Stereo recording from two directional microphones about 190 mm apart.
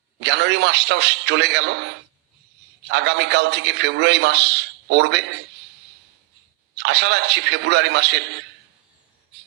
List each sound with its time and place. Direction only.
0.2 s a man's voice: 65° right (ahead or behind)
6.7 s a man's voice: 65° right (ahead or behind)